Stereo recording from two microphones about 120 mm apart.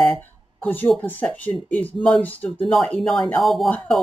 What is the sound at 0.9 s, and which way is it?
Speech, 15° left (ahead or behind).